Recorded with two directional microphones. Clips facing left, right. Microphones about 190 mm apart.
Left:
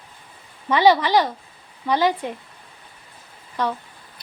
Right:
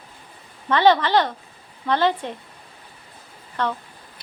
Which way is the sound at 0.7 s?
10° left (ahead or behind).